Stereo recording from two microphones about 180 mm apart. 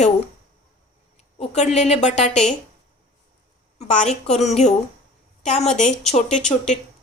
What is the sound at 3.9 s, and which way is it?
A woman's voice, 40° left (ahead or behind).